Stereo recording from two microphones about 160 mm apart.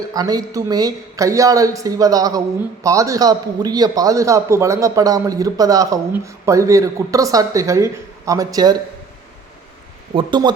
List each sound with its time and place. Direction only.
0.1 s a man's voice: 25° right (ahead or behind)
10.2 s a man's voice: 30° right (ahead or behind)